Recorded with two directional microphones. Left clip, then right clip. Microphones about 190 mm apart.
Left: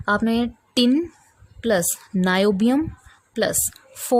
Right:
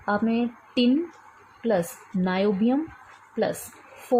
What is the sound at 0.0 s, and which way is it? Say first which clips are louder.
Speech: left 4 dB; 70° left (ahead or behind).